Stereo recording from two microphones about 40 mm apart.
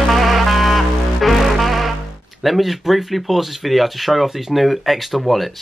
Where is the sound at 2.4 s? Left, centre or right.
Centre.